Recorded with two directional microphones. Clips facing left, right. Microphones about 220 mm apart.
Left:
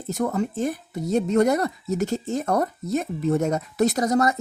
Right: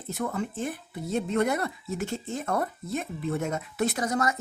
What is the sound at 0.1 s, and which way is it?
Speech, 40° left (ahead or behind).